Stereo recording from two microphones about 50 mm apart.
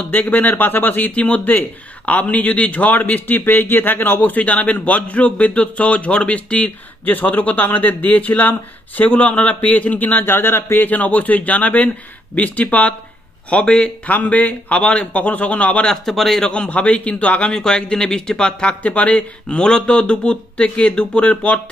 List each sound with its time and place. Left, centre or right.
0.1 s speech: left
15.9 s speech: centre
16.5 s speech: left
17.5 s speech: centre
19.4 s speech: centre